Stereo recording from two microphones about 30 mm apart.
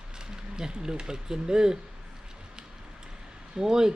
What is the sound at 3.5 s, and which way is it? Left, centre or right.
Speech, right.